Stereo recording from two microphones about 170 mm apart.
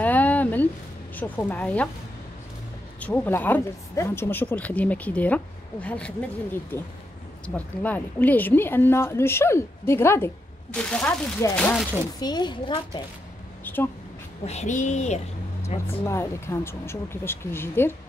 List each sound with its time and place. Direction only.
0.0 s a sound: 10° left (ahead or behind)
1.1 s speech: 10° left (ahead or behind)
3.0 s speech: 10° left (ahead or behind)
12.2 s a woman's voice: 25° left (ahead or behind)
13.7 s a sound: 10° left (ahead or behind)
14.4 s speech: 40° left (ahead or behind)
15.9 s speech: 15° left (ahead or behind)